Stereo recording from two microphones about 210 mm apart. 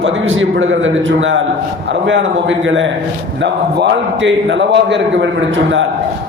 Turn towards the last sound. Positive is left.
turn(degrees=-60)  # may be behind; listen again after turning